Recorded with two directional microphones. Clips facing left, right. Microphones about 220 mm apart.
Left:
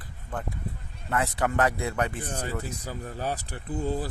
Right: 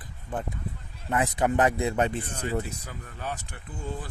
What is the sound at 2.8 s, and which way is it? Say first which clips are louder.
Speech: left 5 dB; 35° left (ahead or behind).